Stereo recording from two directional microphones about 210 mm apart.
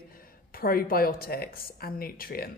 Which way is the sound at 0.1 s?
45° left (ahead or behind).